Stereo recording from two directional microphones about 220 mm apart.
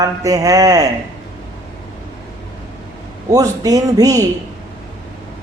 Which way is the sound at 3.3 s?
15° right (ahead or behind).